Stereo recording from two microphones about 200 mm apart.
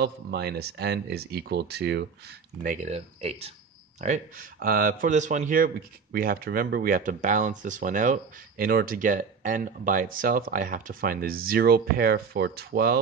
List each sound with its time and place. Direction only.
0.0 s speech: 55° right (ahead or behind)
2.6 s speech: 40° right (ahead or behind)
4.0 s speech: 40° right (ahead or behind)